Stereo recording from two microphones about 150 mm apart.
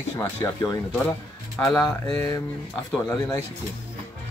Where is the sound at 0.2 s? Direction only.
15° left (ahead or behind).